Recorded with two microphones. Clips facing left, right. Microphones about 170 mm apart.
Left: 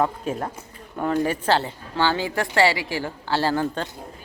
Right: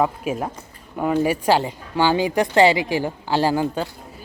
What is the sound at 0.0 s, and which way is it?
A woman's voice, 10° right (ahead or behind).